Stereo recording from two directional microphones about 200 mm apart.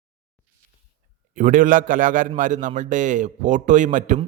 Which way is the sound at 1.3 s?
40° right (ahead or behind).